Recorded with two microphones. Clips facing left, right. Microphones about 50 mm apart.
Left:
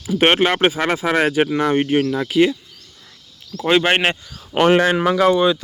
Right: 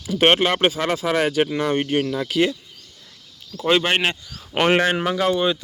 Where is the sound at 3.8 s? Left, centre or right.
Left.